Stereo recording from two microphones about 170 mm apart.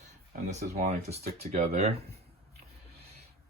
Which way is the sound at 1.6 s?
40° right (ahead or behind).